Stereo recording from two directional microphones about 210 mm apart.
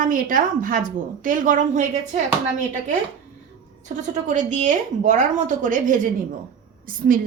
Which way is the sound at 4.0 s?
35° right (ahead or behind).